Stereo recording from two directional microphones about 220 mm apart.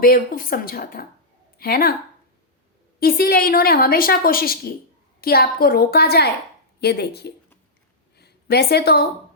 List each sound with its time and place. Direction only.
0.0 s a woman's voice: 40° left (ahead or behind)
3.0 s a woman's voice: 45° left (ahead or behind)